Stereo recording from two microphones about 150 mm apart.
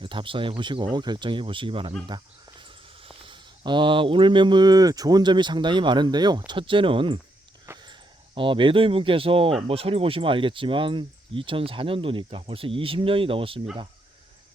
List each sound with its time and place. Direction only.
0.0 s speech: 35° right (ahead or behind)
7.7 s a sound: 15° right (ahead or behind)
8.4 s speech: 35° right (ahead or behind)